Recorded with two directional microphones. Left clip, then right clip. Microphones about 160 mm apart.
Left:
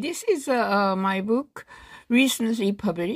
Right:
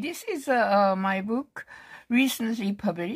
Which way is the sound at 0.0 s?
20° left (ahead or behind).